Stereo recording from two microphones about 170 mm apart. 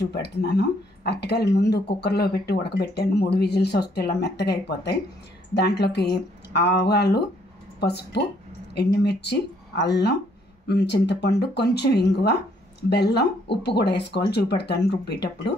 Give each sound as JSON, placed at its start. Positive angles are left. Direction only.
{"t": 0.1, "sound": "speech", "side_deg": 75}